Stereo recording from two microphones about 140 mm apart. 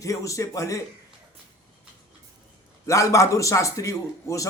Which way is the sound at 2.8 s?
25° left (ahead or behind).